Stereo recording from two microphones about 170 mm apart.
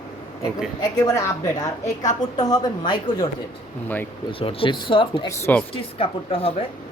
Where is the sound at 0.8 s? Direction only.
20° left (ahead or behind).